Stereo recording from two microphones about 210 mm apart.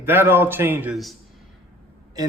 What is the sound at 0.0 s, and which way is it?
A man's voice, 10° right (ahead or behind).